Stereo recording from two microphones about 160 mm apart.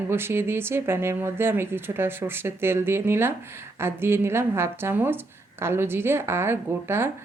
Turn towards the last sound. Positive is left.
turn(degrees=-15)  # may be behind; listen again after turning